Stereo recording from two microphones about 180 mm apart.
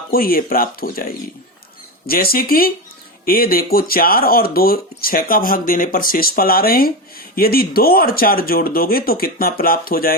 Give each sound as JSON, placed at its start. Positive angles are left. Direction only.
{"t": 0.1, "sound": "speech", "side_deg": 55}